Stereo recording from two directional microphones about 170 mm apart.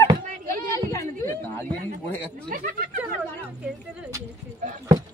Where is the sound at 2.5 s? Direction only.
50° right (ahead or behind).